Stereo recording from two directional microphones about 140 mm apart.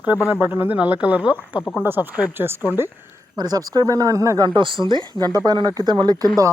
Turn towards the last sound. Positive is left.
turn(degrees=-30)  # may be behind; listen again after turning